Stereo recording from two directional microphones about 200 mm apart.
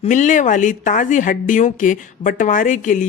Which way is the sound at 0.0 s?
40° left (ahead or behind).